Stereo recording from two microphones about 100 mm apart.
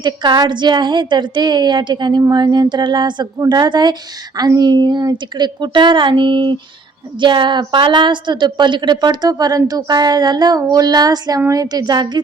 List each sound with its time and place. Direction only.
0.0 s a woman's voice: 50° right (ahead or behind)